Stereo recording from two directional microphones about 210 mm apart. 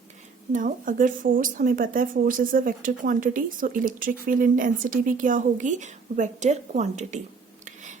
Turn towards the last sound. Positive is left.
turn(degrees=-35)  # may be behind; listen again after turning